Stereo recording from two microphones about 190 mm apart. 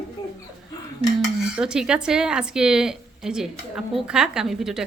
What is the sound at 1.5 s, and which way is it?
A woman's voice, 5° right (ahead or behind).